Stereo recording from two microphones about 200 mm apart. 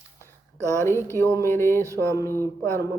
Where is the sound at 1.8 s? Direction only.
15° right (ahead or behind).